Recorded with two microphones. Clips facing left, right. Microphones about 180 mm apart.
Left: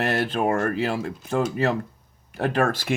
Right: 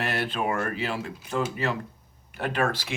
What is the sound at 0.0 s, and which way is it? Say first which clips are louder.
Speech: left 5 dB; 45° left (ahead or behind).